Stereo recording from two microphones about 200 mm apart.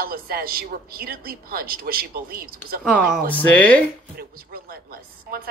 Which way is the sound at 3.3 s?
5° left (ahead or behind).